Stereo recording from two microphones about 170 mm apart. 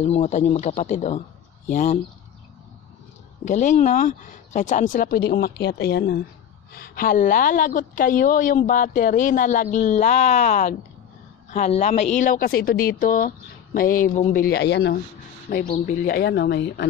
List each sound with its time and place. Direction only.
0.0 s a woman's voice: 40° left (ahead or behind)
3.4 s a woman's voice: 45° left (ahead or behind); by 15.0 s 80° left
15.5 s speech: 50° left (ahead or behind); by 16.8 s 90° left